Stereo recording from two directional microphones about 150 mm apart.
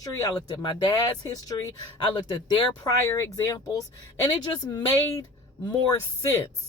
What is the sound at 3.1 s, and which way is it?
Speech, 20° left (ahead or behind).